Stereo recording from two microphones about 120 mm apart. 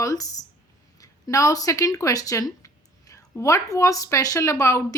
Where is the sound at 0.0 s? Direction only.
30° left (ahead or behind).